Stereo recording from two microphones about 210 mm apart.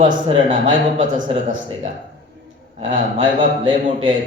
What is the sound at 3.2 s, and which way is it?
Speech, 25° right (ahead or behind).